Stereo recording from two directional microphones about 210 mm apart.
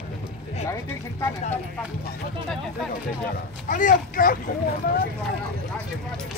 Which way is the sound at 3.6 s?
40° left (ahead or behind).